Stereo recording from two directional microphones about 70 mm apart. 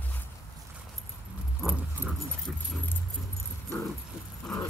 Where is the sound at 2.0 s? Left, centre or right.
Right.